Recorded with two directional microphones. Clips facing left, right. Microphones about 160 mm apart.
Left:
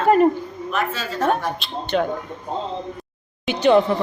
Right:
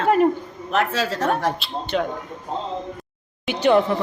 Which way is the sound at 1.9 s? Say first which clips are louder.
Left 2 dB; centre (ahead or behind).